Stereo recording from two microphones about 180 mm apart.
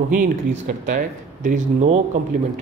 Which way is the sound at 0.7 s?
45° right (ahead or behind).